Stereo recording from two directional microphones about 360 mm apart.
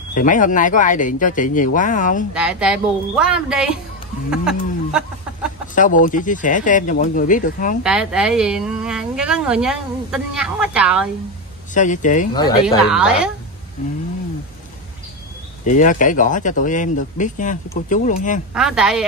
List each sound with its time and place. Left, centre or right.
0.1 s speech: left
2.3 s speech: centre
5.8 s speech: left
7.8 s speech: centre
11.7 s speech: left
12.6 s speech: centre
15.7 s speech: left
18.5 s speech: centre